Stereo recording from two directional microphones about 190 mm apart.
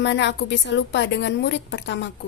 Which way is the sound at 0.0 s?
65° left (ahead or behind).